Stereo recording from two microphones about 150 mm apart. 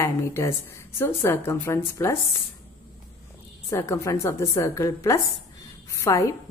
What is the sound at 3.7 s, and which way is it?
A woman's voice, 20° left (ahead or behind).